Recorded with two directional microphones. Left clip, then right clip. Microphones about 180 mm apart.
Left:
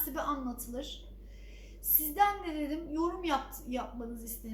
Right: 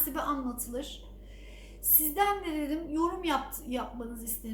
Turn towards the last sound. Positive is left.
turn(degrees=-10)  # may be behind; listen again after turning